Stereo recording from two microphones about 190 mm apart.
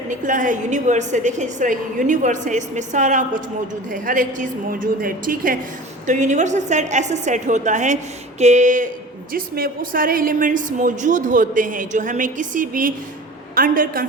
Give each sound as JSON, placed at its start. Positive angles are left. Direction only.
{"t": 0.1, "sound": "a woman's voice", "side_deg": -45}